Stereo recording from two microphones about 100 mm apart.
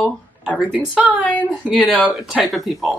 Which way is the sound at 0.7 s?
15° right (ahead or behind).